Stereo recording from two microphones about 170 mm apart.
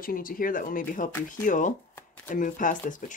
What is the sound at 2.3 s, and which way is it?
Speech, 50° left (ahead or behind).